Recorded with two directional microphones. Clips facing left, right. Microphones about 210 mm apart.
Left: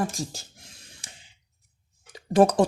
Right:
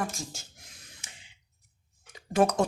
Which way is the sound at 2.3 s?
35° left (ahead or behind).